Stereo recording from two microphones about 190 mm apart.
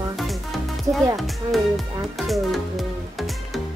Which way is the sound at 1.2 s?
Centre (ahead or behind).